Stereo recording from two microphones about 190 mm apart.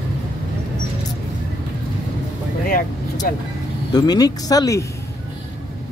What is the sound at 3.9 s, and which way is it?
Speech, 20° left (ahead or behind).